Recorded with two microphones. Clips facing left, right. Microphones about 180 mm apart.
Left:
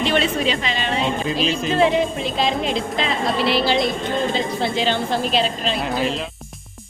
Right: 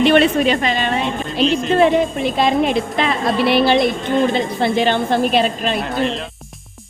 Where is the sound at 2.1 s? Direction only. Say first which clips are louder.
Right 5 dB; 60° right (ahead or behind).